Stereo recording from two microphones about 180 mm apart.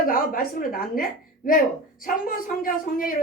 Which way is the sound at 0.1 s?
50° left (ahead or behind).